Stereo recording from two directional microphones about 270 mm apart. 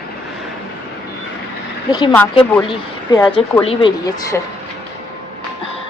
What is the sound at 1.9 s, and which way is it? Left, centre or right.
Speech, centre.